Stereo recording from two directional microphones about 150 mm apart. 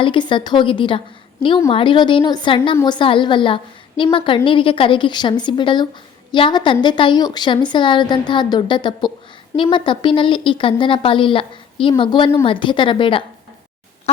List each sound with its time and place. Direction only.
0.0 s a woman's voice: 35° left (ahead or behind)